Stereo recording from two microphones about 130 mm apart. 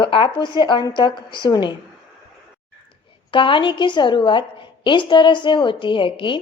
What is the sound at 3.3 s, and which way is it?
A woman's voice, 40° left (ahead or behind).